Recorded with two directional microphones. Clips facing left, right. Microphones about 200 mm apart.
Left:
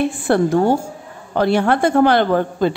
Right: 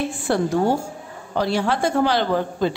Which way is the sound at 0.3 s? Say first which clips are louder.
Left 4 dB; 55° left (ahead or behind).